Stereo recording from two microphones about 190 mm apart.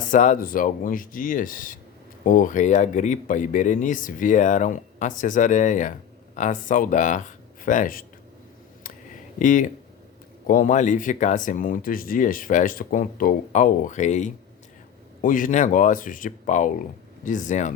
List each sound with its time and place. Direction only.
0.1 s speech: 40° left (ahead or behind)
9.4 s speech: 45° left (ahead or behind)